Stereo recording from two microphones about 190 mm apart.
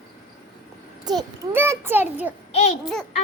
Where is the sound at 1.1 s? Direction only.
15° right (ahead or behind).